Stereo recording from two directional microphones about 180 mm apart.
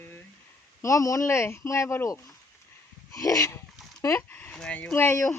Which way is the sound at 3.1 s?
20° left (ahead or behind).